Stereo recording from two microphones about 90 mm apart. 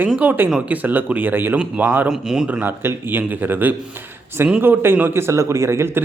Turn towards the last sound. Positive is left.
turn(degrees=-30)  # may be behind; listen again after turning